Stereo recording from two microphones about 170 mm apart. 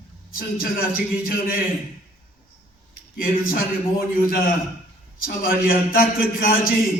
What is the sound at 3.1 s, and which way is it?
A man's voice, 60° left (ahead or behind).